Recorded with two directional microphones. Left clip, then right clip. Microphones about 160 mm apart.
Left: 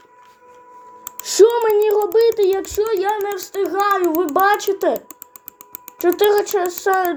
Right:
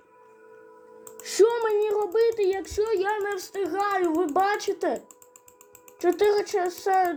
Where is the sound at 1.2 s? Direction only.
55° left (ahead or behind).